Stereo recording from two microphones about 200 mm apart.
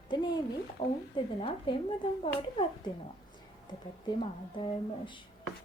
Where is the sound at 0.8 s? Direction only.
35° left (ahead or behind).